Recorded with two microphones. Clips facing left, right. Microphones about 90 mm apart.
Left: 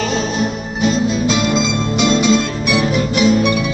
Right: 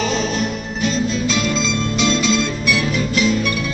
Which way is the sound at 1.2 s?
15° left (ahead or behind).